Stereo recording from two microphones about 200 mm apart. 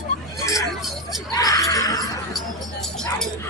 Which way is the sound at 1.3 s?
15° left (ahead or behind).